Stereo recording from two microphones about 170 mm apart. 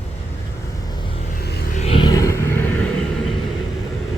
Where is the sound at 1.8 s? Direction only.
35° left (ahead or behind); by 2.7 s 15° left (ahead or behind).